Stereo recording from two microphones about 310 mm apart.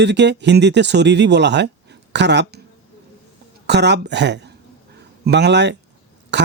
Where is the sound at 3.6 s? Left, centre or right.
Right.